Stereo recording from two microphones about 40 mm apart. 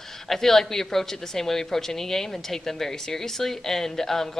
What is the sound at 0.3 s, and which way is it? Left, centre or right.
A woman's voice, centre.